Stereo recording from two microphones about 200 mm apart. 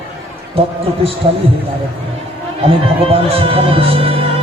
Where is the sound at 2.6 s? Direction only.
30° right (ahead or behind).